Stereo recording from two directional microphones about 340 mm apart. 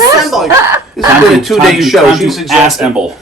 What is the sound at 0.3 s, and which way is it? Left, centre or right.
Speech, centre.